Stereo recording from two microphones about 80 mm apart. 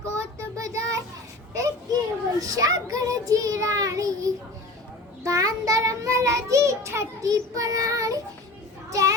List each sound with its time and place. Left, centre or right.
0.2 s child singing: right
1.5 s a sound: right
2.4 s a child's voice: right
5.2 s child singing: right
7.3 s a child's voice: right